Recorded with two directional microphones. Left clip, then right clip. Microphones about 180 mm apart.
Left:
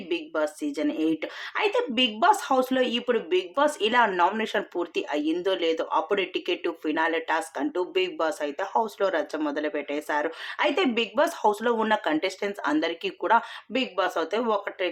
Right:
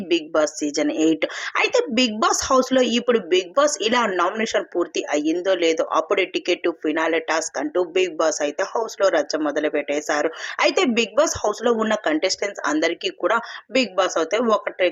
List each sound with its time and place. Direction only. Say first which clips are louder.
0.1 s speech: right 8 dB; 40° right (ahead or behind)